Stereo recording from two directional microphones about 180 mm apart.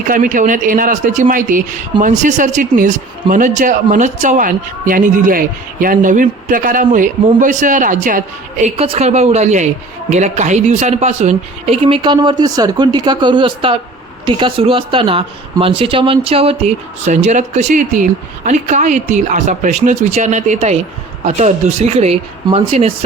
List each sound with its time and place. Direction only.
0.1 s a man's voice: 50° right (ahead or behind)
8.6 s a woman's voice: 35° right (ahead or behind)